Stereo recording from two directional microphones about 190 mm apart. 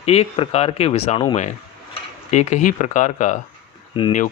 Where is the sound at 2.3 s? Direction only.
35° left (ahead or behind).